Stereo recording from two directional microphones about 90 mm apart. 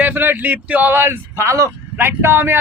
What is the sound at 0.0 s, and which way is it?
Speech, 20° right (ahead or behind).